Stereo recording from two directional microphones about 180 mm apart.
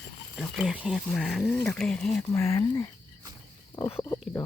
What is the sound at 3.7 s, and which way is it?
Speech, 20° left (ahead or behind).